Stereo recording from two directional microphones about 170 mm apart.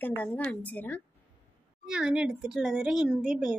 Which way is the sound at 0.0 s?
10° left (ahead or behind).